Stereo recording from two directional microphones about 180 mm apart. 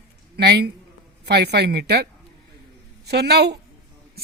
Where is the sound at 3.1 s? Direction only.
65° right (ahead or behind).